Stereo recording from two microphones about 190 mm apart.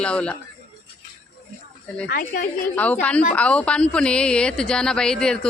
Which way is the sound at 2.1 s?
55° left (ahead or behind).